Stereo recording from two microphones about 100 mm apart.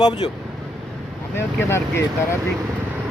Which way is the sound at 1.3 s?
25° left (ahead or behind).